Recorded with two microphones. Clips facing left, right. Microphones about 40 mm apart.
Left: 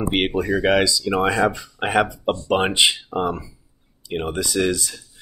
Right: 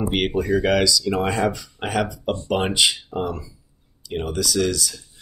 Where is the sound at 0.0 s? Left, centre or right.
Left.